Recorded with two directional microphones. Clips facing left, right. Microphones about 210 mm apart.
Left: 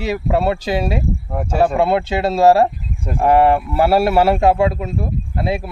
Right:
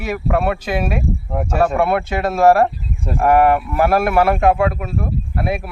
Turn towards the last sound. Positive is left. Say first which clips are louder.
# even
turn(degrees=25)  # may be behind; listen again after turning